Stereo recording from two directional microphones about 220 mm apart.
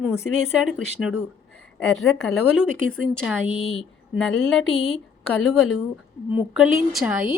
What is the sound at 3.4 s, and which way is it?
Speech, 25° left (ahead or behind).